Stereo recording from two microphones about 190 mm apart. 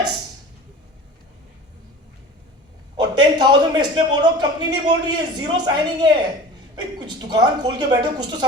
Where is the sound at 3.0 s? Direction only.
20° right (ahead or behind).